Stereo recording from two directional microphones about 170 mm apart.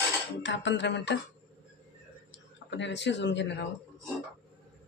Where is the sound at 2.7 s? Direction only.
90° left.